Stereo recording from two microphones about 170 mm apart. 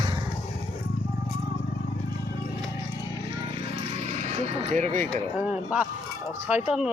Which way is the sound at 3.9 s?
40° right (ahead or behind).